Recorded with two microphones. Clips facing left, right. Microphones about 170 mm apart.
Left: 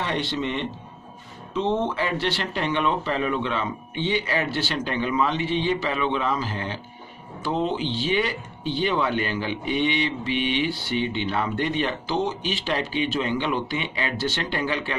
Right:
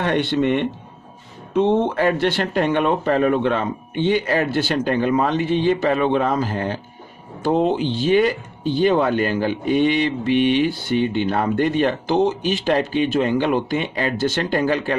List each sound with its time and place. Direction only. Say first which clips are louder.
0.0 s speech: right 8 dB; 55° right (ahead or behind)